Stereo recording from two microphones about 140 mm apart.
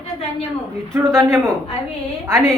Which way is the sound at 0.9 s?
20° right (ahead or behind).